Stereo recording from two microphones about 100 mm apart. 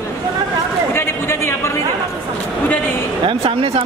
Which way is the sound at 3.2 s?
70° right (ahead or behind).